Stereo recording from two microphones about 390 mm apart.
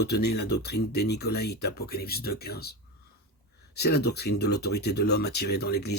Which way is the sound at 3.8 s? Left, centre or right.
Left.